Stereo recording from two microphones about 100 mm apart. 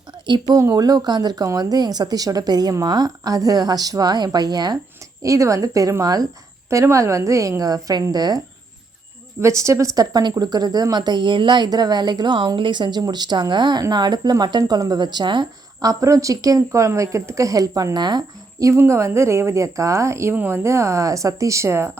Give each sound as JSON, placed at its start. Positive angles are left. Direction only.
{"t": 0.5, "sound": "a woman's voice", "side_deg": -35}
{"t": 5.2, "sound": "a woman's voice", "side_deg": -30}
{"t": 9.4, "sound": "a woman's voice", "side_deg": -30}
{"t": 15.9, "sound": "a woman's voice", "side_deg": -35}
{"t": 18.7, "sound": "a woman's voice", "side_deg": -30}